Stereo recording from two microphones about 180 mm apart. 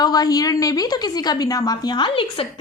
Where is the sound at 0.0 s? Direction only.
20° left (ahead or behind).